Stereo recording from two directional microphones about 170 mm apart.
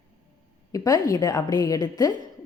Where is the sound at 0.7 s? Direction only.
20° left (ahead or behind).